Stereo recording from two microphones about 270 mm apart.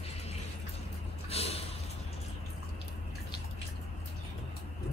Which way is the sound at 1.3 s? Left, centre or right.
Left.